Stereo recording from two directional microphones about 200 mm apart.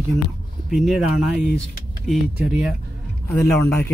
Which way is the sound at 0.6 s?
Centre (ahead or behind).